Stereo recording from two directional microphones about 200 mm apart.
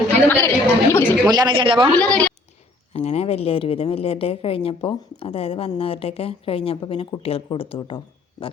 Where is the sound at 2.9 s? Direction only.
30° left (ahead or behind).